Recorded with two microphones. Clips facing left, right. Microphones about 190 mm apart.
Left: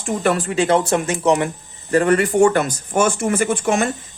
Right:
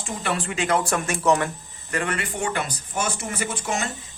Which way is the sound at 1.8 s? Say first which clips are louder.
Left 12 dB; 40° left (ahead or behind).